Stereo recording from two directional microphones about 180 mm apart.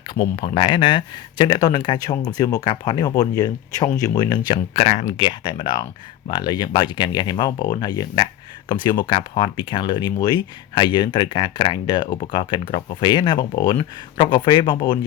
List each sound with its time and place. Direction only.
0.1 s speech: 30° left (ahead or behind)